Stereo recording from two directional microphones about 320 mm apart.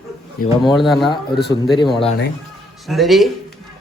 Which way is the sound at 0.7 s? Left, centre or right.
Centre.